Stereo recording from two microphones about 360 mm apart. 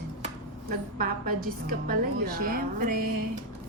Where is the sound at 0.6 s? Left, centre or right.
Right.